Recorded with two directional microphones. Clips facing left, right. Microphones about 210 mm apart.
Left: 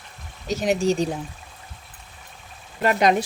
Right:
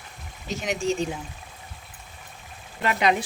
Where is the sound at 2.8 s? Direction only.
40° left (ahead or behind).